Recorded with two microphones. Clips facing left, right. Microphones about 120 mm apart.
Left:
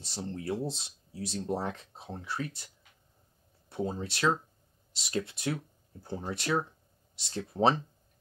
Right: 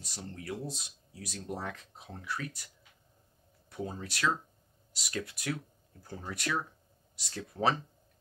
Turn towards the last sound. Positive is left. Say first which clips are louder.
# left 4 dB
turn(degrees=25)  # may be behind; listen again after turning